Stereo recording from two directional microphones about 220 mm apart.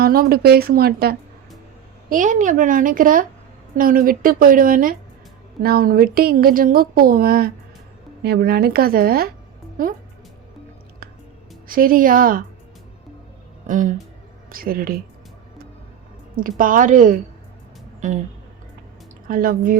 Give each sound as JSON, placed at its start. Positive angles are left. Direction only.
{"t": 0.0, "sound": "a woman's voice", "side_deg": -45}
{"t": 11.7, "sound": "a woman's voice", "side_deg": -40}
{"t": 13.7, "sound": "a woman's voice", "side_deg": -35}
{"t": 16.3, "sound": "a woman's voice", "side_deg": -40}
{"t": 19.3, "sound": "a woman's voice", "side_deg": -40}